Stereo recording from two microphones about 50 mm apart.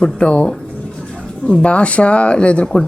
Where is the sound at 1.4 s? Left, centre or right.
Left.